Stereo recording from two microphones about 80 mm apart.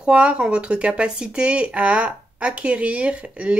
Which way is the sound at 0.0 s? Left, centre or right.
Centre.